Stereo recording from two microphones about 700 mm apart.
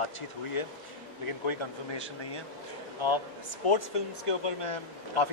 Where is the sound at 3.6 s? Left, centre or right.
Left.